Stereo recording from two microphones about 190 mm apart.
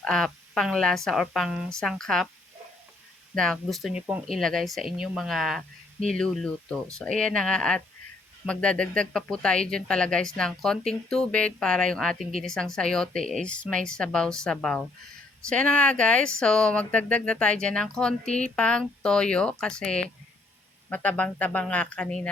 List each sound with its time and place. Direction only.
0.0 s speech: 5° left (ahead or behind)
3.3 s speech: 5° left (ahead or behind)
12.2 s a woman's voice: 30° left (ahead or behind)
12.5 s speech: 5° left (ahead or behind)